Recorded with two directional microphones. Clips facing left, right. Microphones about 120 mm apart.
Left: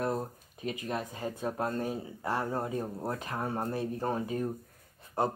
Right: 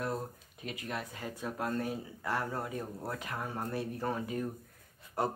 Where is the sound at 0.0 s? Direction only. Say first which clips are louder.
Left 4 dB; 30° left (ahead or behind).